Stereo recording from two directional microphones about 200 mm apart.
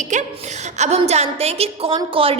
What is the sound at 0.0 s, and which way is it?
A woman's voice, 35° right (ahead or behind).